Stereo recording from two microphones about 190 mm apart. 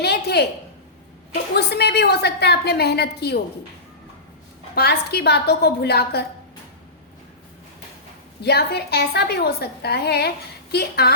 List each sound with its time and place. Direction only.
0.0 s a sound: 60° left (ahead or behind)
1.5 s a woman's voice: 60° left (ahead or behind)
4.7 s a woman's voice: 55° left (ahead or behind)
8.4 s a woman's voice: 60° left (ahead or behind)